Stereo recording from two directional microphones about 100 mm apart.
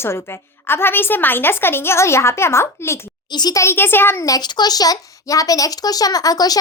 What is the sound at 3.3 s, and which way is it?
Speech, 45° left (ahead or behind).